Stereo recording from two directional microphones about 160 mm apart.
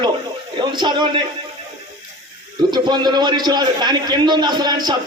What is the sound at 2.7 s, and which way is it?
A man's voice, 25° right (ahead or behind).